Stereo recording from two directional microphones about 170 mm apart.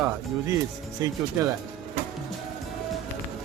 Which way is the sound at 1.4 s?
20° right (ahead or behind).